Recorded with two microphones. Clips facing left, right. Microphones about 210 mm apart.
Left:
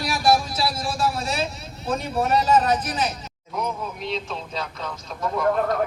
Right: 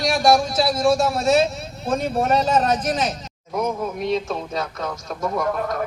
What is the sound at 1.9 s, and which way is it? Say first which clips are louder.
Speech: right 3 dB; 50° right (ahead or behind).